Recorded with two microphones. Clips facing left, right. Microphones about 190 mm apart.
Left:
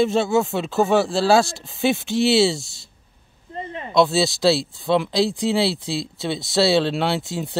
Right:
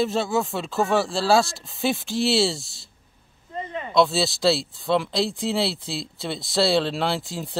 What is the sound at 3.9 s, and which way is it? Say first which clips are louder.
Speech: left 3 dB; centre (ahead or behind).